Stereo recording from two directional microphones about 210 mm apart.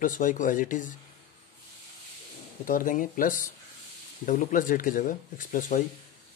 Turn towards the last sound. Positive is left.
turn(degrees=40)  # may be behind; listen again after turning